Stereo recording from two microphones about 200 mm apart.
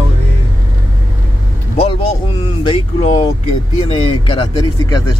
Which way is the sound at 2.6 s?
35° left (ahead or behind).